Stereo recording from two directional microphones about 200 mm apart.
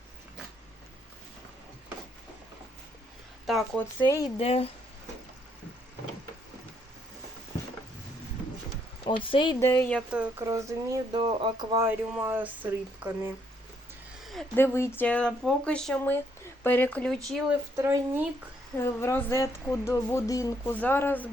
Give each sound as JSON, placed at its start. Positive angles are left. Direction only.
{"t": 3.4, "sound": "a sound", "side_deg": 0}
{"t": 4.0, "sound": "speech", "side_deg": 15}
{"t": 4.4, "sound": "speech", "side_deg": 30}
{"t": 9.0, "sound": "speech", "side_deg": 25}
{"t": 10.1, "sound": "speech", "side_deg": -10}
{"t": 14.3, "sound": "a sound", "side_deg": 0}
{"t": 14.6, "sound": "speech", "side_deg": 10}
{"t": 17.7, "sound": "speech", "side_deg": -10}
{"t": 18.8, "sound": "speech", "side_deg": 15}